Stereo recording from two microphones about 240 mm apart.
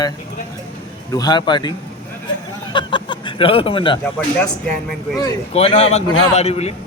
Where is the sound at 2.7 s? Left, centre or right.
Centre.